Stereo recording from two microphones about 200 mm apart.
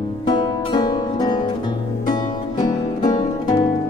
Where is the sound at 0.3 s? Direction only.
20° left (ahead or behind).